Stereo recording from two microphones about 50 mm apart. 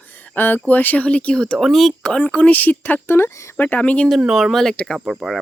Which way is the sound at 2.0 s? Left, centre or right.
Centre.